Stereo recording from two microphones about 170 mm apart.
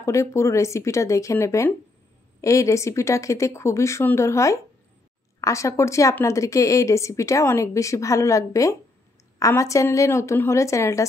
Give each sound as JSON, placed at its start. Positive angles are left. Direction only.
{"t": 0.0, "sound": "a woman's voice", "side_deg": 15}